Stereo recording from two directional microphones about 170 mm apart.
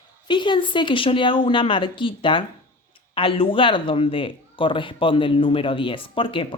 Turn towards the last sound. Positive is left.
turn(degrees=30)  # may be behind; listen again after turning